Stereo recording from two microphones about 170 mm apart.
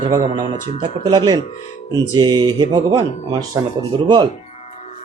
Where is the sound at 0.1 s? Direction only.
25° right (ahead or behind).